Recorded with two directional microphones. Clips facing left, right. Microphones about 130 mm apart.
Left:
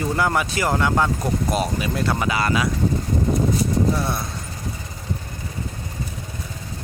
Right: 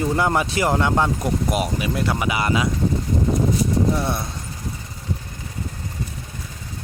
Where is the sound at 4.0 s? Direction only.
20° right (ahead or behind).